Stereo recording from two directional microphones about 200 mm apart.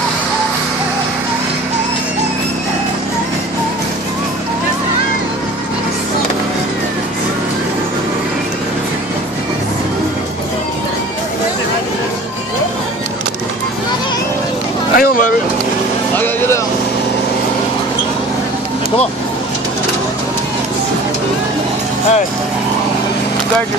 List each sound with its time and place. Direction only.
15.0 s vehicle: 45° left (ahead or behind)
16.2 s vehicle: 10° left (ahead or behind)